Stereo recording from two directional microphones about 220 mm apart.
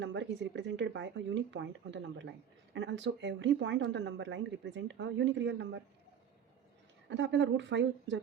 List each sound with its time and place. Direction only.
0.0 s speech: 55° right (ahead or behind)
7.1 s speech: 55° right (ahead or behind)